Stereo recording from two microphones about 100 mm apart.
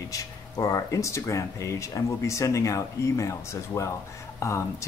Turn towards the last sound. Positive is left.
turn(degrees=30)  # may be behind; listen again after turning